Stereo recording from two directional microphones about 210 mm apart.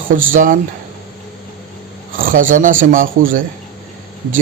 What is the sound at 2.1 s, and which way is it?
Speech, 40° right (ahead or behind).